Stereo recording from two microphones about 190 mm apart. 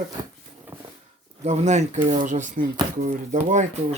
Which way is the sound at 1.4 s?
40° right (ahead or behind).